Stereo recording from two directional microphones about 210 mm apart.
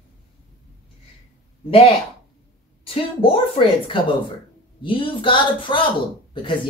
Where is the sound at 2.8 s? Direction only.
25° left (ahead or behind).